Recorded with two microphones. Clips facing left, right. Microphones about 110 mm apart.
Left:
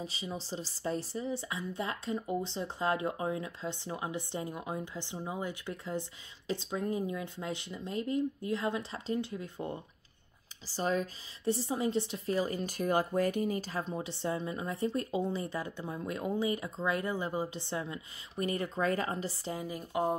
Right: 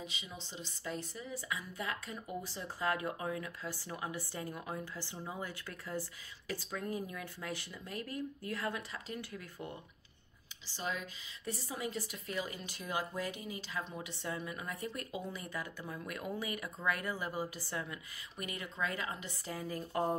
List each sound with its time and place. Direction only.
0.0 s speech: 35° left (ahead or behind)
10.7 s speech: 40° left (ahead or behind)
19.5 s speech: 15° left (ahead or behind)